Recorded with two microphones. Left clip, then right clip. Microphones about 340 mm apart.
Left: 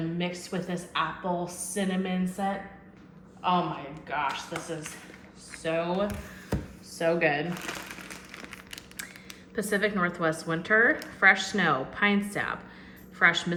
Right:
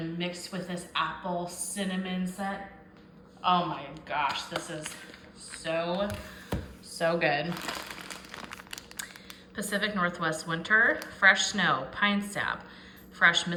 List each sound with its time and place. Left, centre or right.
0.2 s a woman's voice: centre
7.5 s speech: right
9.6 s a woman's voice: centre